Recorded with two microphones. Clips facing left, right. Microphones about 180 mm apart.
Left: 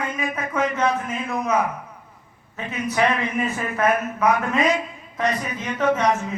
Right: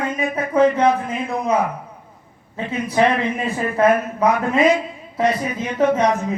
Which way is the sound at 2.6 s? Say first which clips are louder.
Right 4 dB; 30° right (ahead or behind).